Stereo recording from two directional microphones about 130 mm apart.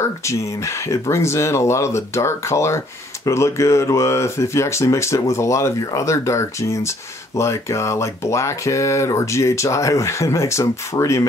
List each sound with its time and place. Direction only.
0.0 s speech: 20° left (ahead or behind)